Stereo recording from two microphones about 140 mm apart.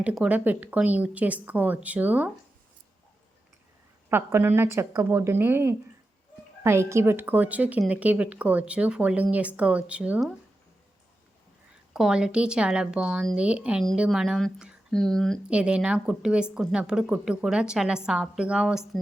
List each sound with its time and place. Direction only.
0.0 s a woman's voice: 10° right (ahead or behind)
4.1 s a woman's voice: 15° right (ahead or behind)
11.9 s a woman's voice: 5° right (ahead or behind)
15.4 s a woman's voice: 5° right (ahead or behind)